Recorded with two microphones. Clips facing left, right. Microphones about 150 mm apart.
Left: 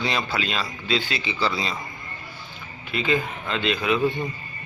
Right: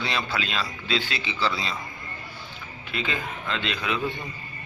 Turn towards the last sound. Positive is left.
turn(degrees=5)  # may be behind; listen again after turning